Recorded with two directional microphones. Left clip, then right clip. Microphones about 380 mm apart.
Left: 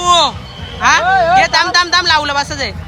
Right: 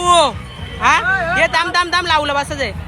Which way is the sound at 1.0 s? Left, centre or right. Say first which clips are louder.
Left 6 dB; left.